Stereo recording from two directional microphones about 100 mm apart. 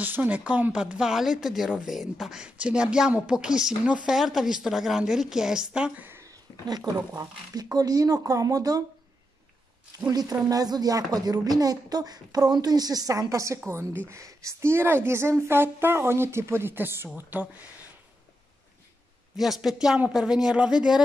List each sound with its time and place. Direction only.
0.0 s speech: 15° right (ahead or behind)
7.2 s speech: 40° right (ahead or behind)
9.9 s a woman's voice: 40° right (ahead or behind); by 17.5 s 20° right (ahead or behind)
19.3 s a woman's voice: 5° right (ahead or behind)